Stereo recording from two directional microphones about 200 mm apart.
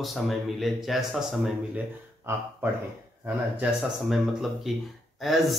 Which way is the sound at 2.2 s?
10° right (ahead or behind).